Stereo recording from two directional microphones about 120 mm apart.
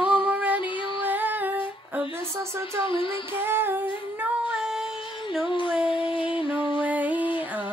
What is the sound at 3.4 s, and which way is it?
Female singing, 20° right (ahead or behind).